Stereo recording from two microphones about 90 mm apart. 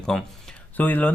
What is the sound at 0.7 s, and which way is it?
Speech, 20° left (ahead or behind).